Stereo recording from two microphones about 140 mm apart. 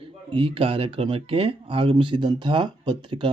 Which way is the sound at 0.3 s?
40° right (ahead or behind).